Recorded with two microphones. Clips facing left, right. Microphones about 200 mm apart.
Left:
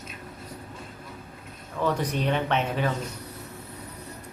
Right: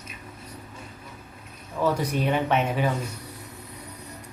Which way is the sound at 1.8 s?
10° right (ahead or behind).